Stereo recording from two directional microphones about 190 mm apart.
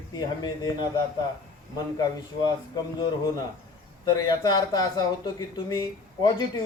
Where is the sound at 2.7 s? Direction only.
20° left (ahead or behind).